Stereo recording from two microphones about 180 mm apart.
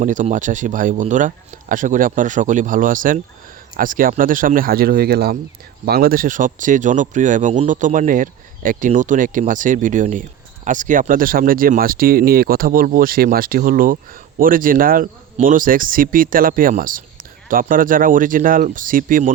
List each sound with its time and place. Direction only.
0.0 s speech: 45° right (ahead or behind)